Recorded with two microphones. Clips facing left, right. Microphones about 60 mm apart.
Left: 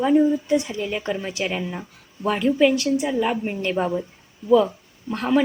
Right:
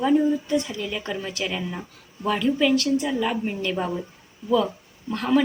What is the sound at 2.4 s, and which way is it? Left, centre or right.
A woman's voice, left.